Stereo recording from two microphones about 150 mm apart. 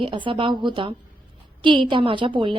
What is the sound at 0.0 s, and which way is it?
A woman's voice, 35° right (ahead or behind).